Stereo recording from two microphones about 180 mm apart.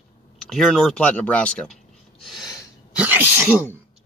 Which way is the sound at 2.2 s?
Centre (ahead or behind).